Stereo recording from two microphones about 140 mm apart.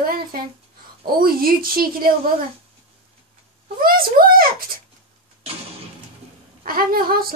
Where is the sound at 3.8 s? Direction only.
90° right.